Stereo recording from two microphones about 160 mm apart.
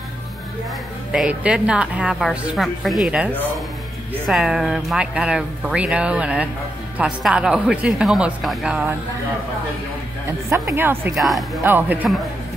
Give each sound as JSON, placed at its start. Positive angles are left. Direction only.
{"t": 1.1, "sound": "a woman's voice", "side_deg": -5}
{"t": 4.3, "sound": "speech", "side_deg": 0}
{"t": 10.5, "sound": "a woman's voice", "side_deg": -15}
{"t": 11.1, "sound": "speech", "side_deg": 0}
{"t": 11.6, "sound": "a woman's voice", "side_deg": -10}